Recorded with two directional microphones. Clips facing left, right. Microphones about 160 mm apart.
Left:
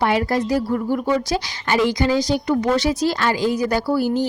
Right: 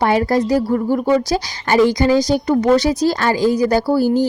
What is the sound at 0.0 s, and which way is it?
A woman's voice, 40° right (ahead or behind).